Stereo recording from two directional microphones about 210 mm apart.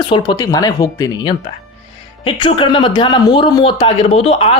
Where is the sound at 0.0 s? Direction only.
20° left (ahead or behind).